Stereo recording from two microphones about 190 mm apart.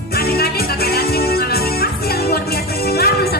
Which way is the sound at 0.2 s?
55° left (ahead or behind).